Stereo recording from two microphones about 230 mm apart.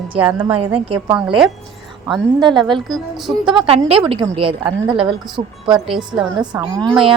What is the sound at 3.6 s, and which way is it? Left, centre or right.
A woman's voice, right.